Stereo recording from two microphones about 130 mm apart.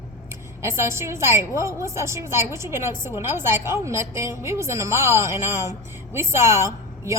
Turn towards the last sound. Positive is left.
turn(degrees=-20)  # may be behind; listen again after turning